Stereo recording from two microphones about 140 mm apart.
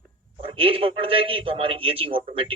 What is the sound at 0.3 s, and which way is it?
A man's voice, 40° right (ahead or behind).